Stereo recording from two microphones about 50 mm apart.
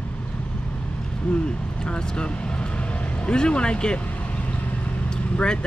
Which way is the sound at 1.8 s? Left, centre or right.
Centre.